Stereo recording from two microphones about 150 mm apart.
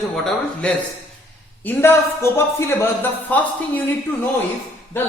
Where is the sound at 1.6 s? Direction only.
15° left (ahead or behind).